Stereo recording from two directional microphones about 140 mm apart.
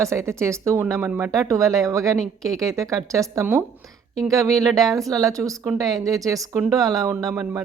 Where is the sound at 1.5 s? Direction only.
20° right (ahead or behind).